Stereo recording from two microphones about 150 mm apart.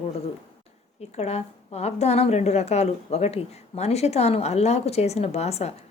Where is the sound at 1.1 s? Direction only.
45° left (ahead or behind).